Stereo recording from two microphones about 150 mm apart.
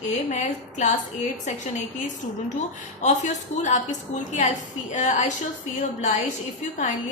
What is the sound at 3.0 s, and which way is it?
A woman's voice, 50° left (ahead or behind).